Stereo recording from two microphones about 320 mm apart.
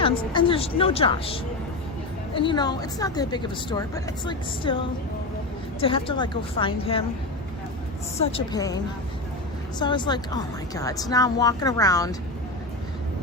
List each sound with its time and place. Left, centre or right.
0.0 s a woman's voice: centre
5.8 s a woman's voice: centre
8.3 s a woman's voice: centre